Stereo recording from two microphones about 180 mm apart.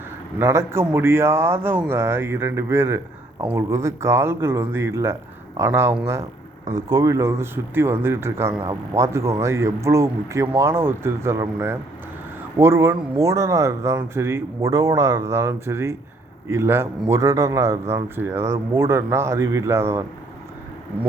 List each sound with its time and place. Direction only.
0.3 s speech: 15° right (ahead or behind)